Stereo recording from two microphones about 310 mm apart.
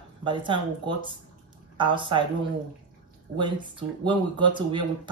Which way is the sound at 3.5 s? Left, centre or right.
Centre.